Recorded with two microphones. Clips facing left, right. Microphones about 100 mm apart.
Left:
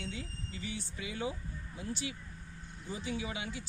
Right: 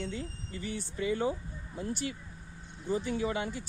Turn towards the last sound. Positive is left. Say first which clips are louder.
# right 7 dB
turn(degrees=-50)  # may be behind; listen again after turning